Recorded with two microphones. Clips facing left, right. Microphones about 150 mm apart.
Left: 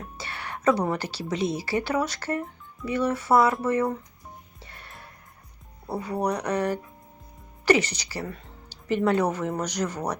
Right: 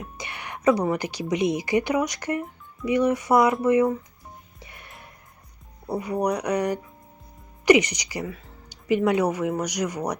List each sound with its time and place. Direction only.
0.0 s speech: 15° right (ahead or behind)
4.6 s music: 15° right (ahead or behind)
6.0 s speech: 10° right (ahead or behind)